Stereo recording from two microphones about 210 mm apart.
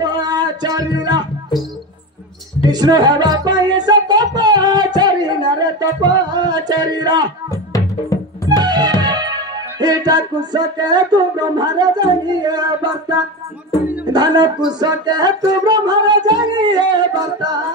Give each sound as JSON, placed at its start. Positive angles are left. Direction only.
{"t": 0.0, "sound": "music", "side_deg": -20}
{"t": 2.7, "sound": "music", "side_deg": -20}
{"t": 8.5, "sound": "music", "side_deg": -20}
{"t": 14.1, "sound": "a sound", "side_deg": -20}